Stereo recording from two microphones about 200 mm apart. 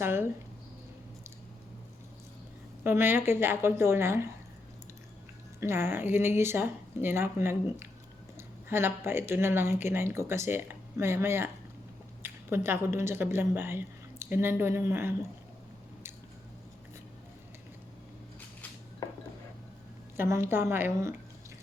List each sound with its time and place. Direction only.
0.0 s speech: 10° right (ahead or behind)
2.8 s speech: 10° right (ahead or behind)
5.5 s speech: 10° right (ahead or behind)
20.1 s speech: 15° right (ahead or behind)